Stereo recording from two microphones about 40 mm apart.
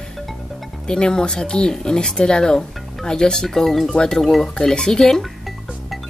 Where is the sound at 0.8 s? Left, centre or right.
Centre.